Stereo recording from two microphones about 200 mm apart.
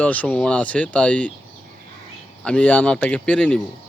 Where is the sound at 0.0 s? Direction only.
5° left (ahead or behind).